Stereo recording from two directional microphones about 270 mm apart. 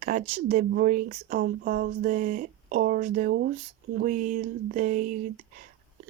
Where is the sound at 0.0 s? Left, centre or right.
Right.